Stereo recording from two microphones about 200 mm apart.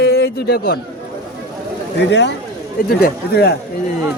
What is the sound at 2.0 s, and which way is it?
A man's voice, 60° left (ahead or behind).